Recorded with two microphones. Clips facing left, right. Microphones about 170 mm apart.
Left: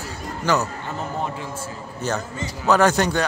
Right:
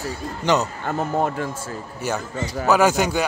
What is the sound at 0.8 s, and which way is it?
Speech, 50° right (ahead or behind).